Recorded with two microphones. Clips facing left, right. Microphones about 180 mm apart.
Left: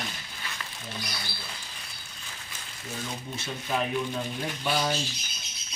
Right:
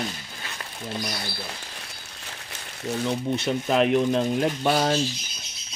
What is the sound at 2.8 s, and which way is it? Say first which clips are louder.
Speech: right 11 dB; 70° right (ahead or behind).